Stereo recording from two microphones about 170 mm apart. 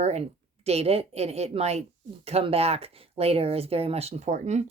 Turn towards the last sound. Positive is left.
turn(degrees=-45)  # may be behind; listen again after turning